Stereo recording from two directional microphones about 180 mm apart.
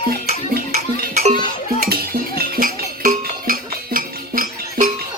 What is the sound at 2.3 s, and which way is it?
Music, 55° right (ahead or behind).